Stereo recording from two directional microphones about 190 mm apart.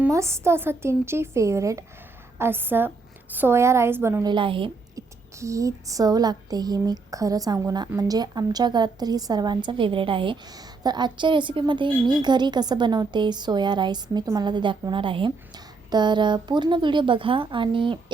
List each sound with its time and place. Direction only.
0.0 s a woman's voice: 15° right (ahead or behind)
5.4 s speech: 15° right (ahead or behind)